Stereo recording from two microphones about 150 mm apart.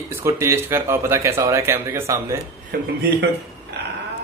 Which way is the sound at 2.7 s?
90° right.